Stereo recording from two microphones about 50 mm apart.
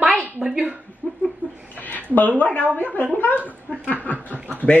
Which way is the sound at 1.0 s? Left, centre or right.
Left.